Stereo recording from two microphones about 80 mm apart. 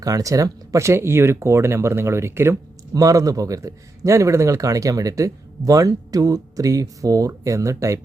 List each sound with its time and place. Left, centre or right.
0.0 s speech: right
2.9 s a man's voice: right